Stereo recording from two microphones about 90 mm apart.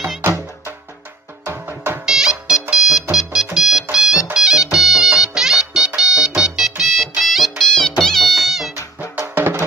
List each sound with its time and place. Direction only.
1.4 s music: 25° right (ahead or behind)
2.0 s music: 5° right (ahead or behind)
9.2 s music: 25° right (ahead or behind)